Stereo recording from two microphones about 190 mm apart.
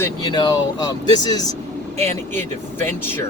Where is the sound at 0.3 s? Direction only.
20° left (ahead or behind).